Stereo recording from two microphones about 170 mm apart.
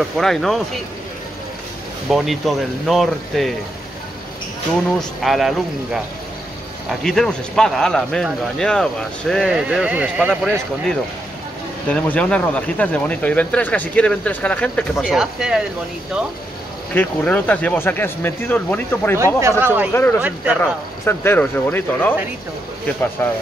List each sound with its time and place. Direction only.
0.2 s speech: centre (ahead or behind)
2.0 s speech: centre (ahead or behind)
4.9 s speech: centre (ahead or behind)
7.0 s speech: 5° left (ahead or behind)
11.9 s speech: 5° left (ahead or behind)
16.9 s speech: 10° left (ahead or behind)
19.1 s speech: 15° right (ahead or behind)
19.9 s speech: 15° left (ahead or behind)
20.2 s speech: 10° right (ahead or behind)
21.0 s speech: 15° left (ahead or behind)
23.2 s speech: 15° left (ahead or behind)